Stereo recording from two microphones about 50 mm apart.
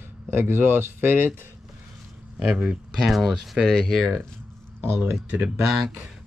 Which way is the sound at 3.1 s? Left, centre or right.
Centre.